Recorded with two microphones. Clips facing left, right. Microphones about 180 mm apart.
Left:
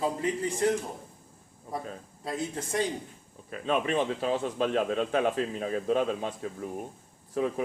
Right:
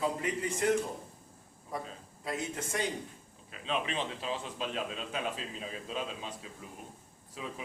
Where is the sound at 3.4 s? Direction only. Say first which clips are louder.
Left 7 dB; 50° left (ahead or behind).